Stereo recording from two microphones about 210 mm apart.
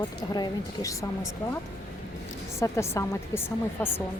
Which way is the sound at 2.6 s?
15° left (ahead or behind).